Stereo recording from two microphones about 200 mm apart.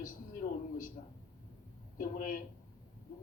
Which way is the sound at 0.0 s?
45° left (ahead or behind).